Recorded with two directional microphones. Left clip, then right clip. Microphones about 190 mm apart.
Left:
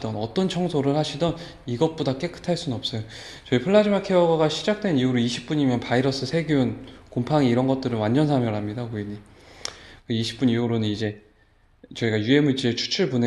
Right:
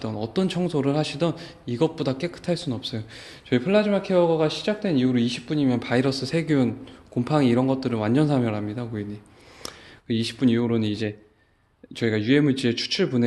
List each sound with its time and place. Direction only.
0.0 s a man's voice: 30° right (ahead or behind)